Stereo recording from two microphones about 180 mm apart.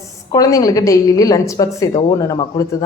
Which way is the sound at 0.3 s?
20° left (ahead or behind).